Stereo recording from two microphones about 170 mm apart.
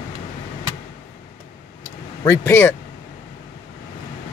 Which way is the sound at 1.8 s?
20° left (ahead or behind).